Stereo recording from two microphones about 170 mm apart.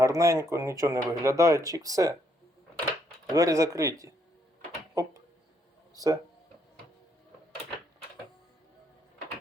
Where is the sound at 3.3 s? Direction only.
20° right (ahead or behind).